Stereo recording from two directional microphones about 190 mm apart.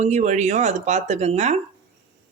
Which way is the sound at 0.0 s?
40° right (ahead or behind).